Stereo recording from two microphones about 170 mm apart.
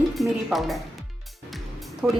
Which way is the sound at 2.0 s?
5° right (ahead or behind).